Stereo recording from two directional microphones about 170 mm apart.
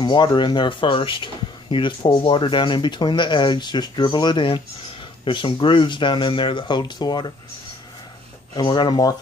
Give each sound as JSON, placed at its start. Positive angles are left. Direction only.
{"t": 0.0, "sound": "speech", "side_deg": 25}
{"t": 8.5, "sound": "speech", "side_deg": 25}